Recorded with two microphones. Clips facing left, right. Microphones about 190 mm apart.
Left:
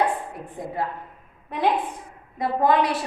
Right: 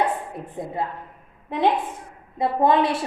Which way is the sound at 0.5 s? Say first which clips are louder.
Right 1 dB; 25° right (ahead or behind).